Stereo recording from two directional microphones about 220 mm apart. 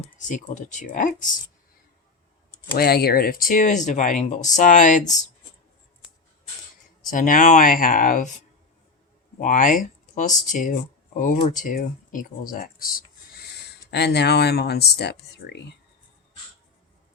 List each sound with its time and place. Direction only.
0.2 s speech: 35° left (ahead or behind)
2.7 s speech: 45° left (ahead or behind)
7.1 s speech: 35° left (ahead or behind)